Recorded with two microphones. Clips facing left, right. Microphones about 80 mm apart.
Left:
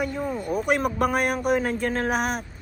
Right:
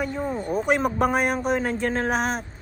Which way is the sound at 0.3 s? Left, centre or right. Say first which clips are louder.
Right 1 dB; right.